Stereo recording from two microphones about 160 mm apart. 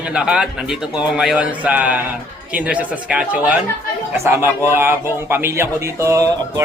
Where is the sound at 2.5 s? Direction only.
10° right (ahead or behind).